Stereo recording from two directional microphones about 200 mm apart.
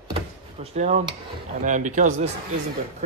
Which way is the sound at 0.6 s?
35° right (ahead or behind).